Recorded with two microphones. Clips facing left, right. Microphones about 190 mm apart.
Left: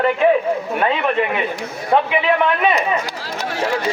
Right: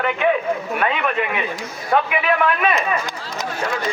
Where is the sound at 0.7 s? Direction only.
30° left (ahead or behind).